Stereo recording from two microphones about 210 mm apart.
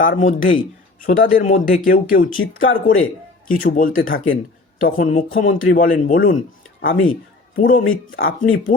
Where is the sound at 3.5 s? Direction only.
40° left (ahead or behind).